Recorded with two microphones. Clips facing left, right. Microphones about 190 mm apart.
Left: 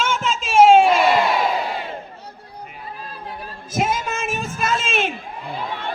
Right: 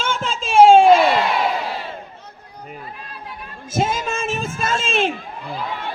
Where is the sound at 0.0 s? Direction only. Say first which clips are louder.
Left 1 dB; 30° right (ahead or behind).